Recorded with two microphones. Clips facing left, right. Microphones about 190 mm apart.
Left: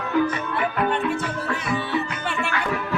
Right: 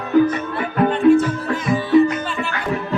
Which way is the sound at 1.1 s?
40° right (ahead or behind).